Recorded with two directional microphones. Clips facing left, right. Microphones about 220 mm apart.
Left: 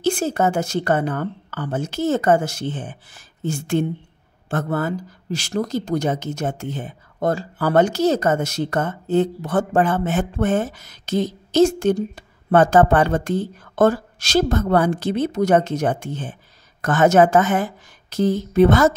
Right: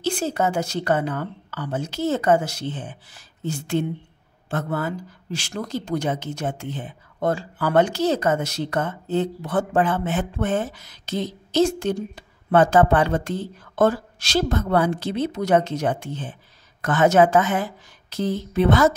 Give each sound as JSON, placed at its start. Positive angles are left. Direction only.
{"t": 0.0, "sound": "speech", "side_deg": 50}